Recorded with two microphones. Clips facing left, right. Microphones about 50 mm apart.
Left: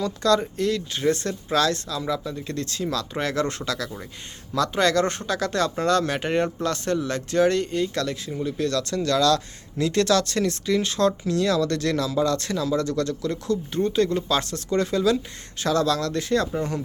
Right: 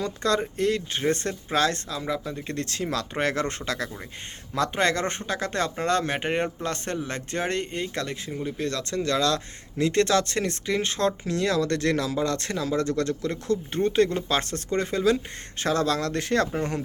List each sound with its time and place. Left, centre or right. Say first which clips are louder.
0.0 s speech: left 4 dB; right
2.6 s speech: left 1 dB; right